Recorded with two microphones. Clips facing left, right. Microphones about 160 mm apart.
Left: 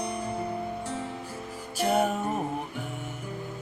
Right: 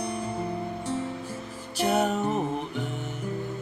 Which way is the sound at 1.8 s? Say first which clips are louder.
Right 1 dB; 5° left (ahead or behind).